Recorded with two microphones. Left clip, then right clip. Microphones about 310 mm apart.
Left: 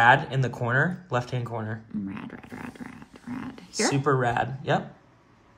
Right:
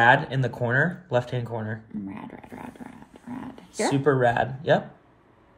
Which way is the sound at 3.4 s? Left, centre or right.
Left.